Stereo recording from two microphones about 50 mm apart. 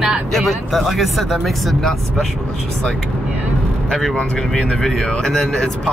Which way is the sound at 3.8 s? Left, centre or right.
Centre.